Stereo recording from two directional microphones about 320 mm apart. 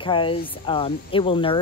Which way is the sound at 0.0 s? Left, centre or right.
Centre.